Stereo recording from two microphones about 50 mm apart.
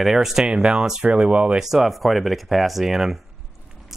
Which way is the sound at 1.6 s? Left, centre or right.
Centre.